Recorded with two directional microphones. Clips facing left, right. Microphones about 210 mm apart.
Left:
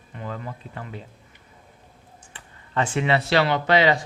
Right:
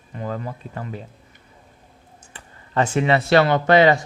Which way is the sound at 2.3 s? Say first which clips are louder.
Right 4 dB; 40° right (ahead or behind).